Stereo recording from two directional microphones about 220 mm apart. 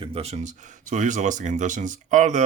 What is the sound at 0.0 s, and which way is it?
Speech, 25° right (ahead or behind).